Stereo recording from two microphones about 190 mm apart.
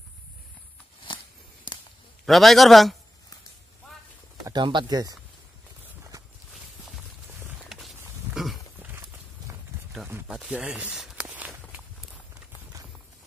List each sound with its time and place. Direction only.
1.0 s a sound: 25° left (ahead or behind)
2.2 s a man's voice: centre (ahead or behind)
4.5 s speech: 25° right (ahead or behind)
7.3 s a sound: 10° right (ahead or behind)
8.4 s wild animals: centre (ahead or behind)
10.0 s walk: 10° right (ahead or behind)